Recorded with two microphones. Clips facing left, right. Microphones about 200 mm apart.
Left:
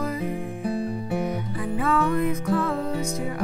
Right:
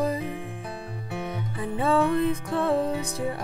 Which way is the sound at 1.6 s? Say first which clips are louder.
Right 1 dB; 30° right (ahead or behind).